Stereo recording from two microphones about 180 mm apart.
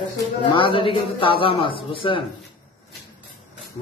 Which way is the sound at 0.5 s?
30° left (ahead or behind).